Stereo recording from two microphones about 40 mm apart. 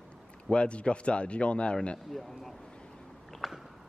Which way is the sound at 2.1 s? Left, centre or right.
Centre.